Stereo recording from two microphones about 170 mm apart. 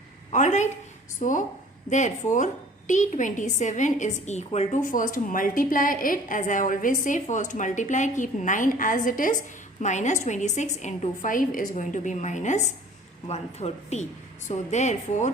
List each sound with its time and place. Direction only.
0.3 s a woman's voice: 45° left (ahead or behind)